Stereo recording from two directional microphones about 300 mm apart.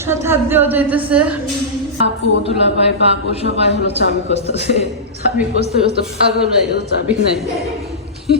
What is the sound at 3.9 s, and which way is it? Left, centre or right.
Speech, right.